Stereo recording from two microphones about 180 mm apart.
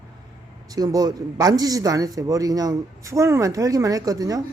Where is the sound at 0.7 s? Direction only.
20° right (ahead or behind).